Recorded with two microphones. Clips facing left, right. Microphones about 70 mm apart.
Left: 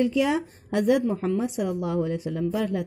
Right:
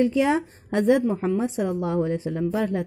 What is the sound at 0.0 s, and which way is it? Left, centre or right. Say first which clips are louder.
A woman's voice: right 2 dB; right.